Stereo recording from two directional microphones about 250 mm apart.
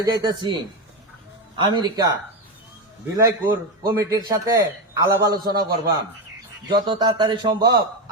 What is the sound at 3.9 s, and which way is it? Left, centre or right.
A man's voice, centre.